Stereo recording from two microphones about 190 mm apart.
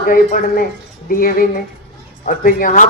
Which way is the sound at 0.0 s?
45° left (ahead or behind).